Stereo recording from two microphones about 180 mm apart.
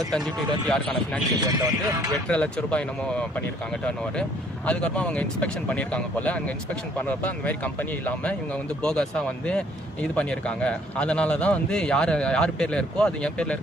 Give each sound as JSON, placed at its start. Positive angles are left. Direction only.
{"t": 0.7, "sound": "speech", "side_deg": 5}
{"t": 1.4, "sound": "speech", "side_deg": -20}
{"t": 2.3, "sound": "speech", "side_deg": 5}